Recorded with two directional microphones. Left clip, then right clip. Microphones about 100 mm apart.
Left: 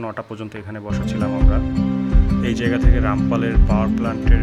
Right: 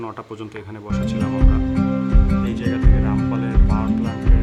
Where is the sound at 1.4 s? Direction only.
Centre (ahead or behind).